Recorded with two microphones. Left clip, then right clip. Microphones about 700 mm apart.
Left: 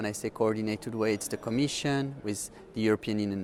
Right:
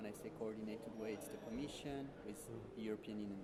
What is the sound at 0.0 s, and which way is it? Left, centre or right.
A man's voice, left.